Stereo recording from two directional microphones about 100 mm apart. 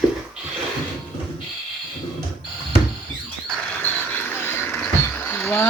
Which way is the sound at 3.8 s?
20° left (ahead or behind).